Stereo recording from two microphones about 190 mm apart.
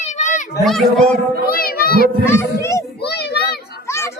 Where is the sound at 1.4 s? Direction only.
50° left (ahead or behind).